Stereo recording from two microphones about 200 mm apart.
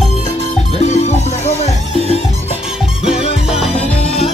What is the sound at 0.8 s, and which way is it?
Music, 35° left (ahead or behind).